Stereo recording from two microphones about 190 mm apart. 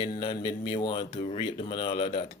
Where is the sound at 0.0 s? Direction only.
25° left (ahead or behind).